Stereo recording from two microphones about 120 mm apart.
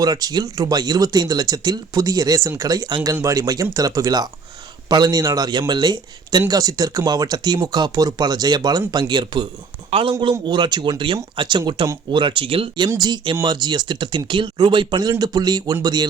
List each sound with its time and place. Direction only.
0.0 s speech: 30° right (ahead or behind)